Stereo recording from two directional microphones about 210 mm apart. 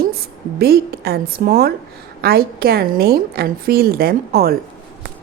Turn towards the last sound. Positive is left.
turn(degrees=-45)  # may be behind; listen again after turning